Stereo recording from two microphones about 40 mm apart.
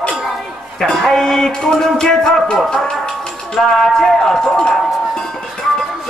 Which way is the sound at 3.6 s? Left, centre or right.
Centre.